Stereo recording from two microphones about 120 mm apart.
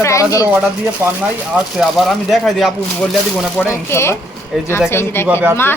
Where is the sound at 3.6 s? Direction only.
20° left (ahead or behind).